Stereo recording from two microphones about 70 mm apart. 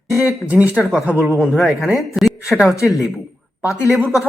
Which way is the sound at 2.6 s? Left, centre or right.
Left.